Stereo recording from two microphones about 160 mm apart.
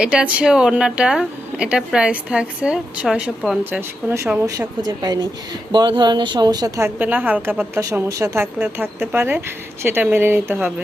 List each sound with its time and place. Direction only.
0.0 s a woman's voice: 5° right (ahead or behind)